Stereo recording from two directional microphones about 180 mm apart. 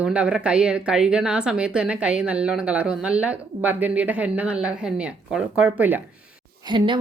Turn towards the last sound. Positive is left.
turn(degrees=-25)  # may be behind; listen again after turning